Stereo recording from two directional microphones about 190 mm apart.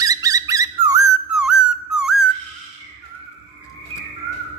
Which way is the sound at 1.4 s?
5° right (ahead or behind).